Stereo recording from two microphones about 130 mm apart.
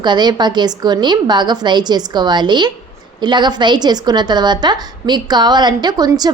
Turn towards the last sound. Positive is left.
turn(degrees=-30)  # may be behind; listen again after turning